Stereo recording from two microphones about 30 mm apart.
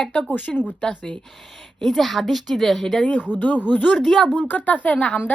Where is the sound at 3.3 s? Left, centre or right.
Left.